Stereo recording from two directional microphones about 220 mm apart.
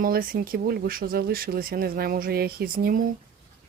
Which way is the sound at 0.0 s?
40° right (ahead or behind).